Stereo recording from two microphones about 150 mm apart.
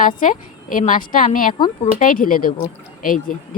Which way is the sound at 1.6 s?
30° left (ahead or behind).